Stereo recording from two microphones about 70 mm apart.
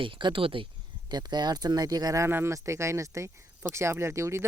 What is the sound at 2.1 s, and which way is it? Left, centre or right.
Speech, right.